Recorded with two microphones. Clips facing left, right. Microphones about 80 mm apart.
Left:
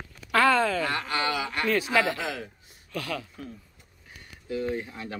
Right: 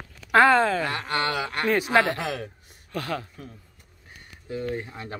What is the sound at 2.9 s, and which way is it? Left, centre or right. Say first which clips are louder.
Speech: right 3 dB; right.